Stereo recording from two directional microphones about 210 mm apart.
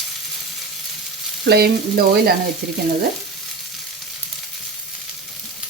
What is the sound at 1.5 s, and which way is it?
Frying, 50° right (ahead or behind).